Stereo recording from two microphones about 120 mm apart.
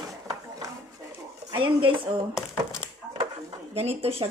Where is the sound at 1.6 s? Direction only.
45° right (ahead or behind).